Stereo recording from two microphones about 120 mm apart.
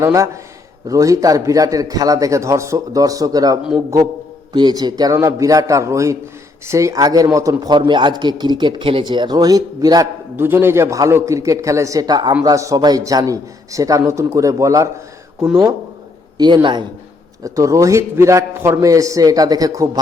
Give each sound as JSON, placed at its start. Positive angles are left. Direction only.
{"t": 0.0, "sound": "a man's voice", "side_deg": -25}
{"t": 10.3, "sound": "a man's voice", "side_deg": -20}
{"t": 16.4, "sound": "a man's voice", "side_deg": -35}